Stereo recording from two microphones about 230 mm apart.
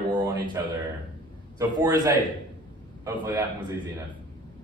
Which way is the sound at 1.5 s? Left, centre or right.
Centre.